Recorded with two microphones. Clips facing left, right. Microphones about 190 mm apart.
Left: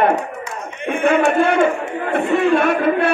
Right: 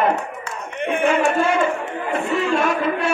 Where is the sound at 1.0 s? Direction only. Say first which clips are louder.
Left 4 dB; 60° left (ahead or behind).